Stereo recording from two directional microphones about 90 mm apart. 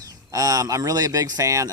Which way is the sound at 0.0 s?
40° right (ahead or behind).